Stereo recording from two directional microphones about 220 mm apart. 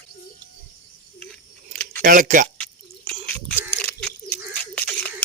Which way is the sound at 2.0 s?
40° right (ahead or behind).